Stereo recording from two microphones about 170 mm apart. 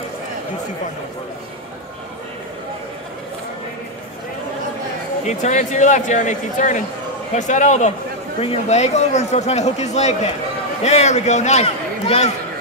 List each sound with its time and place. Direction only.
5.2 s a man's voice: 45° left (ahead or behind)